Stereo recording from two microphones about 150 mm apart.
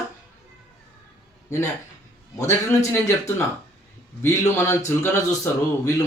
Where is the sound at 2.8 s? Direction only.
20° left (ahead or behind).